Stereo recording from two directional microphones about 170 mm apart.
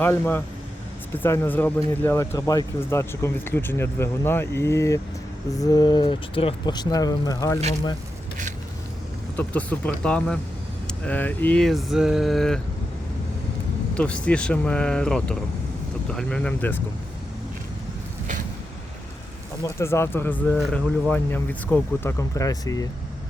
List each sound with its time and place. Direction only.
0.0 s speech: 10° left (ahead or behind)
9.3 s speech: 10° left (ahead or behind)
13.9 s speech: 5° left (ahead or behind)
19.6 s speech: 15° left (ahead or behind)
20.6 s speech: centre (ahead or behind)
21.1 s speech: 10° left (ahead or behind)